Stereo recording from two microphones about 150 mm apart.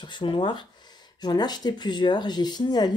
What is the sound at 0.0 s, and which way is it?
Speech, 30° left (ahead or behind).